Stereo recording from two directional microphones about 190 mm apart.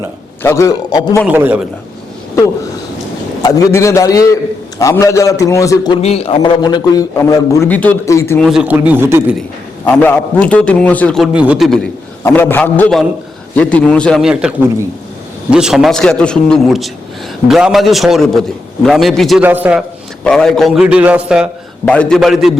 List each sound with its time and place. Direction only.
0.4 s a man's voice: 15° left (ahead or behind)
1.3 s speech: 10° right (ahead or behind)
3.4 s a man's voice: 20° left (ahead or behind)
6.0 s a man's voice: 30° left (ahead or behind)
7.7 s a man's voice: 10° left (ahead or behind)
8.4 s speech: centre (ahead or behind)
9.8 s a man's voice: 10° left (ahead or behind)
15.5 s a man's voice: 5° right (ahead or behind)
20.2 s a man's voice: 5° left (ahead or behind)
21.8 s a man's voice: 5° left (ahead or behind)